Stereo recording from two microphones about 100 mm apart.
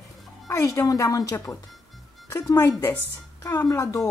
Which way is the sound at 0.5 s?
30° left (ahead or behind).